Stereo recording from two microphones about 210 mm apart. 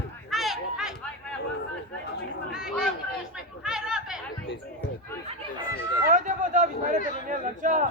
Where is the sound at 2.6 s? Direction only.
5° right (ahead or behind).